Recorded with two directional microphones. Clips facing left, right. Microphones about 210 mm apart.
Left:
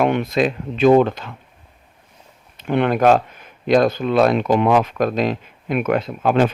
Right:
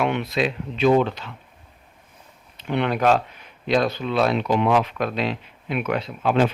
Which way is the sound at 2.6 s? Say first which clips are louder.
Left 5 dB; 50° left (ahead or behind).